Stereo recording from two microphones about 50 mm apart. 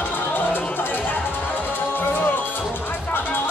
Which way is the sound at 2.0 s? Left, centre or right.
Left.